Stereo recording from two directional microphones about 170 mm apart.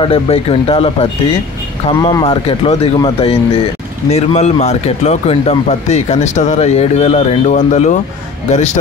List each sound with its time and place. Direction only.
0.0 s speech: 35° left (ahead or behind)
2.0 s speech: 20° left (ahead or behind)
2.2 s speech: 35° left (ahead or behind)